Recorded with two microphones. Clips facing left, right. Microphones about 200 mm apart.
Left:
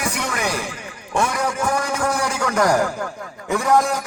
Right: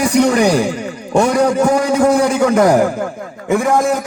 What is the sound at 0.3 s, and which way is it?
A man's voice, 35° right (ahead or behind).